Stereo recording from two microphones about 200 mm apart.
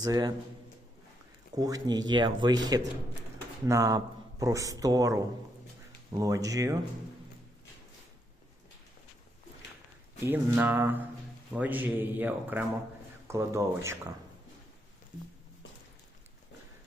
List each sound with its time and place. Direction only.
0.0 s speech: 20° right (ahead or behind)
1.5 s speech: 20° right (ahead or behind)
10.2 s speech: 10° right (ahead or behind)